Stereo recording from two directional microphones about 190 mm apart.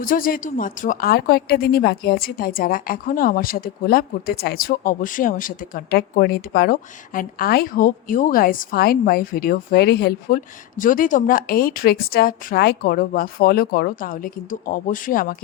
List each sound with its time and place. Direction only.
0.0 s speech: 45° left (ahead or behind)